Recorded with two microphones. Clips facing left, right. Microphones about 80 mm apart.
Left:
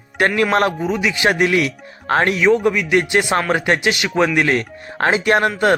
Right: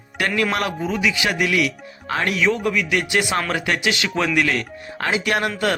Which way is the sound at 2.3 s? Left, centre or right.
Left.